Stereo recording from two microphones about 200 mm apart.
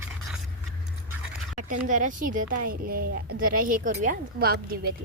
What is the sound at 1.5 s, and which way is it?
A woman's voice, 40° right (ahead or behind).